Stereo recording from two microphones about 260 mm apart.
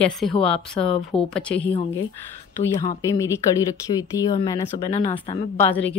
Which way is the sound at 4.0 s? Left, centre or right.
Centre.